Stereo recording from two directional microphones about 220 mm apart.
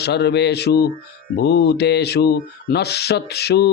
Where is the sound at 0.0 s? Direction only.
50° left (ahead or behind).